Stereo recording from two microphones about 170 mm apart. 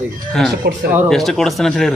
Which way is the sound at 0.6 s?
75° right (ahead or behind).